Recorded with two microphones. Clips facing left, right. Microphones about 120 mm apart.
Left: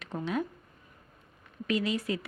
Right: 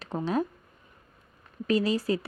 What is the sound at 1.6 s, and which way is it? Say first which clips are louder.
Speech: right 5 dB; 35° right (ahead or behind).